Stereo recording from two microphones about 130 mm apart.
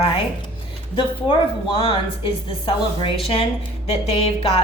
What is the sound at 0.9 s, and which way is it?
A woman's voice, 40° left (ahead or behind).